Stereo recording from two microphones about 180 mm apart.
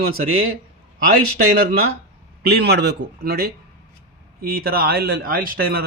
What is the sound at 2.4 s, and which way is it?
A man's voice, 60° right (ahead or behind).